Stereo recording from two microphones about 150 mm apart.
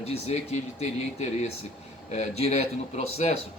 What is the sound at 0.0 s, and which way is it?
Speech, 45° left (ahead or behind).